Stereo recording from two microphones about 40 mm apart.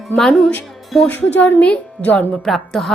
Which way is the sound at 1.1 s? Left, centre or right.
Left.